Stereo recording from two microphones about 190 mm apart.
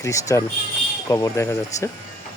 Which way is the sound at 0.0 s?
15° left (ahead or behind).